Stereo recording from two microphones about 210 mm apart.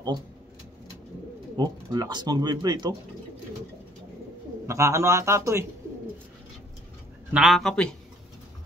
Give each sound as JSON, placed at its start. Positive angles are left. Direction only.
{"t": 1.6, "sound": "speech", "side_deg": -20}
{"t": 4.6, "sound": "a man's voice", "side_deg": -15}
{"t": 7.3, "sound": "a man's voice", "side_deg": 0}